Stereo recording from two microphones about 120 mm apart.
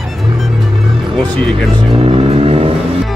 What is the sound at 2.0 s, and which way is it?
Vehicle, 50° right (ahead or behind).